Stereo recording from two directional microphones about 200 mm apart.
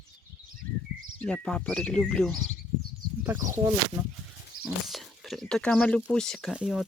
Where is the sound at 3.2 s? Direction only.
15° right (ahead or behind).